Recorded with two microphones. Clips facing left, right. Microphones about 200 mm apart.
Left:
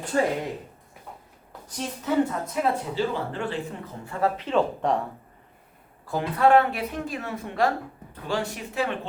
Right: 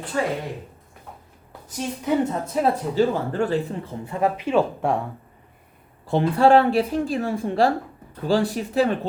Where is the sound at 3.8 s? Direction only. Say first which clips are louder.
Right 3 dB; 20° right (ahead or behind).